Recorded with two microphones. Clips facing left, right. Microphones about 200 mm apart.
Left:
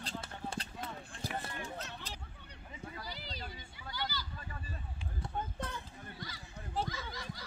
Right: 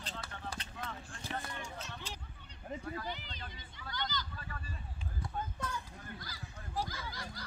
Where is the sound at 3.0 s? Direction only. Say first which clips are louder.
Right 2 dB; 35° left (ahead or behind).